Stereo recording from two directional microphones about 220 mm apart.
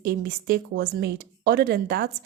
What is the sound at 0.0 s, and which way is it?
A woman's voice, 45° right (ahead or behind).